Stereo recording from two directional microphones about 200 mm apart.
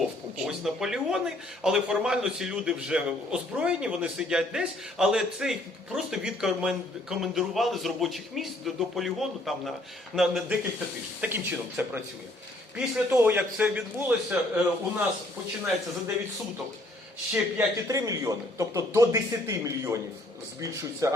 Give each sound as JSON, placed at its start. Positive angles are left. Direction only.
{"t": 0.3, "sound": "a man's voice", "side_deg": 0}
{"t": 17.3, "sound": "a man's voice", "side_deg": -10}
{"t": 21.0, "sound": "a man's voice", "side_deg": -15}